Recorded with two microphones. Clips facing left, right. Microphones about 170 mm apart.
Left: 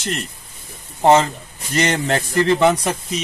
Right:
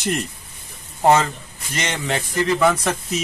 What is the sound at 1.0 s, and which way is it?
A man's voice, 25° left (ahead or behind).